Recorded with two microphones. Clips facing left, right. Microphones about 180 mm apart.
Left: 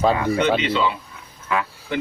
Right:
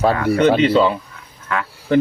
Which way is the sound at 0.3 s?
45° right (ahead or behind).